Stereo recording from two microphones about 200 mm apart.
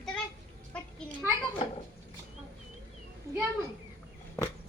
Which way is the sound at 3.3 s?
15° right (ahead or behind).